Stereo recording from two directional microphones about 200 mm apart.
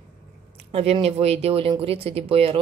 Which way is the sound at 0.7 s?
30° right (ahead or behind).